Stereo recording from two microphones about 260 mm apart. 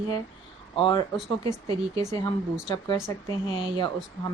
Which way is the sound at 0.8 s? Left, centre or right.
Centre.